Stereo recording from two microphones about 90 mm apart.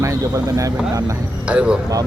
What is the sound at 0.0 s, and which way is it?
Speech, 40° right (ahead or behind).